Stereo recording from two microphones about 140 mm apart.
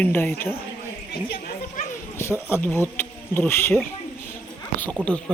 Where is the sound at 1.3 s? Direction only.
90° left.